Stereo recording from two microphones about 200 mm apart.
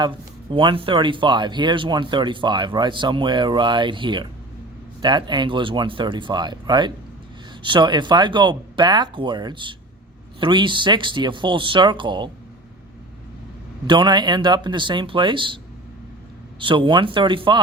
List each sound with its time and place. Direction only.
0.5 s speech: 25° right (ahead or behind)
13.8 s speech: 25° right (ahead or behind)
16.6 s speech: 25° right (ahead or behind)